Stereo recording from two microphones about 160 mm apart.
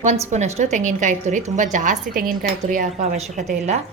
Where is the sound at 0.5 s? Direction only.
45° right (ahead or behind).